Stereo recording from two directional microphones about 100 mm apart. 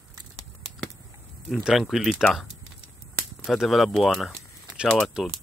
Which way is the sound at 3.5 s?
Centre (ahead or behind).